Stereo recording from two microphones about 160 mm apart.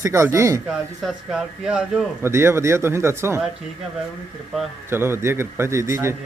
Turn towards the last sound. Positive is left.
turn(degrees=-15)  # may be behind; listen again after turning